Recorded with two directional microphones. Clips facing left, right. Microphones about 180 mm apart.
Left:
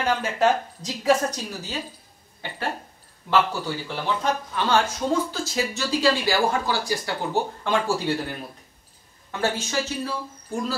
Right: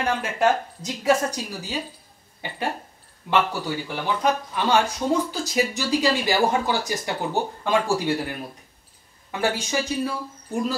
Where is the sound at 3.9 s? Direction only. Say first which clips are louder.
Right 2 dB; 15° right (ahead or behind).